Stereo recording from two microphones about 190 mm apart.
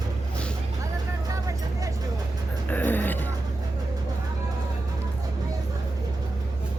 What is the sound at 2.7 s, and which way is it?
Music, 10° left (ahead or behind).